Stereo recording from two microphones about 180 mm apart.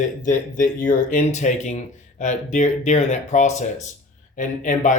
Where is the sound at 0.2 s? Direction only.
45° left (ahead or behind).